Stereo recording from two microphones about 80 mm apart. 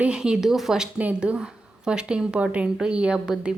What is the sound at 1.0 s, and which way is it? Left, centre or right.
A woman's voice, centre.